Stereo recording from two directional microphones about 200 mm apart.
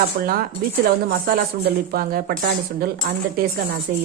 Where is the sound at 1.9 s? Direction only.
45° right (ahead or behind).